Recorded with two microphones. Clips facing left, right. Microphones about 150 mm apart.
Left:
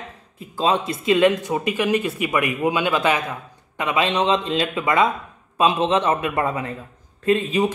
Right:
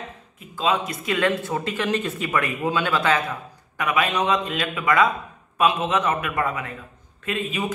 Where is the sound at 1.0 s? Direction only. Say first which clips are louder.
Left 7 dB; 20° left (ahead or behind).